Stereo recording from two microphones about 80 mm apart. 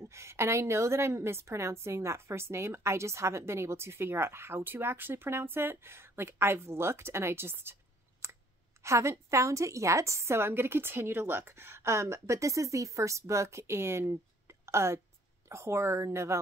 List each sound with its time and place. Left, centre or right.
0.0 s a woman's voice: right
8.2 s a sound: right
8.8 s a woman's voice: right